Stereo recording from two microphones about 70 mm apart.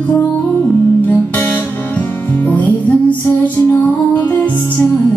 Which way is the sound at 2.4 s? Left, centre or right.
Left.